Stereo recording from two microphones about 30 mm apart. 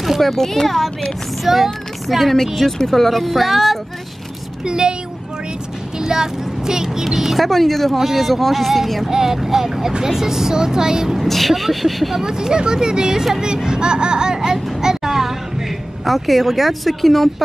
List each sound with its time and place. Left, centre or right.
0.2 s speech: centre
1.4 s child singing: centre
2.4 s speech: centre
4.6 s speech: right
5.9 s speech: right
7.4 s speech: centre
9.1 s speech: centre
11.1 s speech: centre
12.2 s speech: right
13.7 s speech: right
14.8 s child singing: centre
16.0 s speech: centre